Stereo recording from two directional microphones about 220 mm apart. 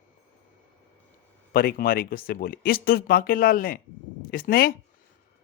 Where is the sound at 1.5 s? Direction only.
45° left (ahead or behind).